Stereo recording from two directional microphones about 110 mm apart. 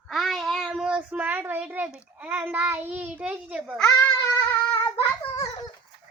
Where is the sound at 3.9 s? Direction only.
30° left (ahead or behind).